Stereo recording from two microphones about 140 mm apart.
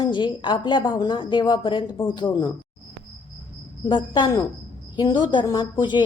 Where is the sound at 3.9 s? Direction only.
35° left (ahead or behind).